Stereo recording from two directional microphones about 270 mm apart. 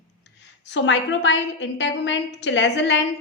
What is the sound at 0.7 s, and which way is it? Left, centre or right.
A woman's voice, left.